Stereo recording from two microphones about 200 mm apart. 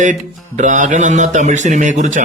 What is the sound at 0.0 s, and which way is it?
Speech, 40° right (ahead or behind).